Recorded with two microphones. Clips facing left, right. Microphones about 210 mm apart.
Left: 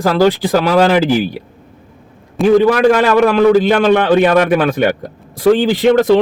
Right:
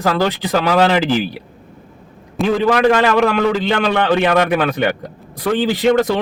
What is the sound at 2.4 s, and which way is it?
Speech, centre (ahead or behind).